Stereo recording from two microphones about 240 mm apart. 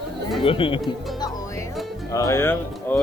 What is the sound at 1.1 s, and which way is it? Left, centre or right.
Music, centre.